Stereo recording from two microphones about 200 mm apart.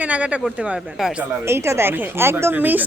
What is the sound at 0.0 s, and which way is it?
A woman's voice, 5° right (ahead or behind).